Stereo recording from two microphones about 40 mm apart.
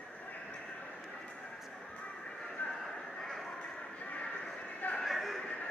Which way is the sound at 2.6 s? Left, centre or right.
Left.